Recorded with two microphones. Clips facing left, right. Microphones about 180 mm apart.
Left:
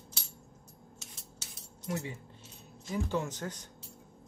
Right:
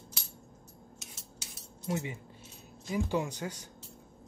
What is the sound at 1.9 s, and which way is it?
Cutlery, 20° right (ahead or behind).